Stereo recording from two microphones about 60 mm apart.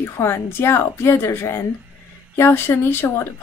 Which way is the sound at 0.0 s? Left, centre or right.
Left.